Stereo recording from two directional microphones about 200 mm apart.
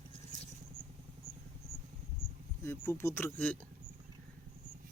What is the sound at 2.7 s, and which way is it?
Speech, 10° left (ahead or behind).